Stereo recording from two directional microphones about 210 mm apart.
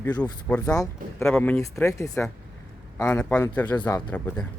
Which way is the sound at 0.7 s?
15° left (ahead or behind).